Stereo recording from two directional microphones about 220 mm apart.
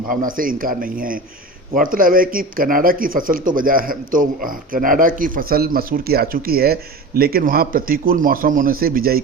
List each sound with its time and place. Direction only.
0.1 s speech: 40° right (ahead or behind)